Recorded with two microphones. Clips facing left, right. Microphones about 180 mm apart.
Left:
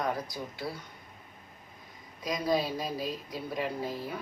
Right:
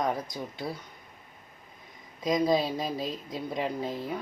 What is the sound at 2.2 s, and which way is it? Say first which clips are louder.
Speech: right 4 dB; 25° right (ahead or behind).